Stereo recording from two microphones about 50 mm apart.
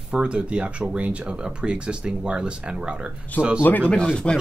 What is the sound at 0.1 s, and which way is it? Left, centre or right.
Speech, right.